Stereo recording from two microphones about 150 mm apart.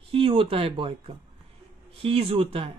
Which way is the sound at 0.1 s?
35° right (ahead or behind).